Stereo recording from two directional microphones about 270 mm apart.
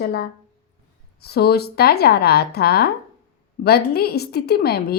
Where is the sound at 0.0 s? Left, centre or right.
Left.